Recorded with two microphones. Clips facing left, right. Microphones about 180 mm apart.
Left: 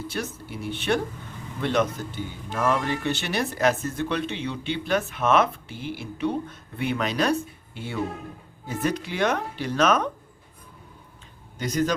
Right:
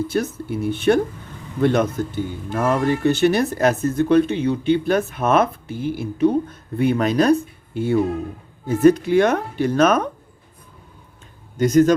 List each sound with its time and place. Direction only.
0.1 s speech: 45° right (ahead or behind)
11.5 s speech: 50° right (ahead or behind)